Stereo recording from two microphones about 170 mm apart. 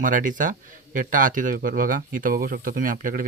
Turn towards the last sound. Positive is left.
turn(degrees=-55)  # may be behind; listen again after turning